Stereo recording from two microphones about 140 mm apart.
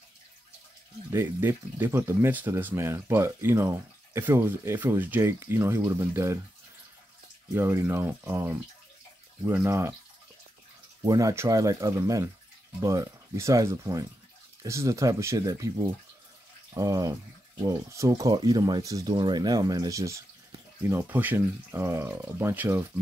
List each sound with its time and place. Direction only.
1.1 s speech: 15° right (ahead or behind)
7.5 s speech: 15° right (ahead or behind)
11.1 s speech: 25° right (ahead or behind)